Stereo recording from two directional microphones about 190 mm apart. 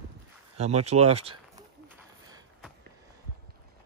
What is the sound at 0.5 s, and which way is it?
Speech, 35° right (ahead or behind).